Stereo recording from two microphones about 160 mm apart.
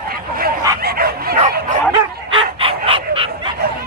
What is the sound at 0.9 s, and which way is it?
Bow-wow, 75° right (ahead or behind).